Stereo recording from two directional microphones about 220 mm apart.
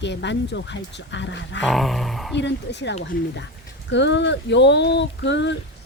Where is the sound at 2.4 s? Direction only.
55° left (ahead or behind).